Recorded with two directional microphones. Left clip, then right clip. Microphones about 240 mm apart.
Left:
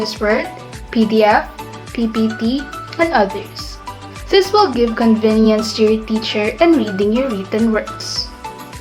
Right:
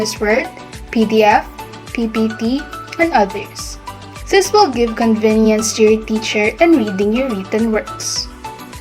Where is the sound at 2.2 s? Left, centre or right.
Centre.